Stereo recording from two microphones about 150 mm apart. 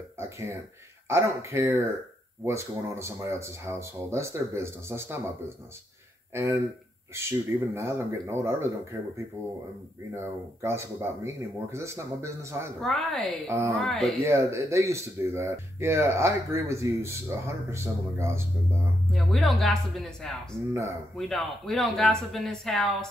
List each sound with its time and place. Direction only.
1.0 s speech: 20° right (ahead or behind)
6.3 s speech: 15° right (ahead or behind)
12.8 s speech: centre (ahead or behind)
14.2 s speech: 20° right (ahead or behind)
19.1 s speech: centre (ahead or behind)